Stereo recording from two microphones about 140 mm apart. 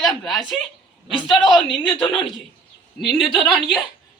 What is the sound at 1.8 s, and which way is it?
Speech, 35° left (ahead or behind).